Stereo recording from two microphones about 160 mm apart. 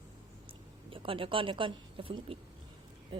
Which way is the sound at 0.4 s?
35° right (ahead or behind).